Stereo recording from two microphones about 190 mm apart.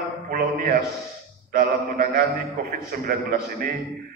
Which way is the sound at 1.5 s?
50° right (ahead or behind).